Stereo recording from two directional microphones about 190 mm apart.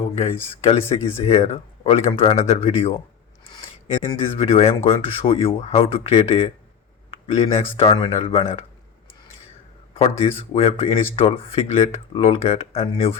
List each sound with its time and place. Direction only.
0.6 s speech: 30° left (ahead or behind)
4.0 s speech: 25° left (ahead or behind)
9.9 s speech: 30° left (ahead or behind)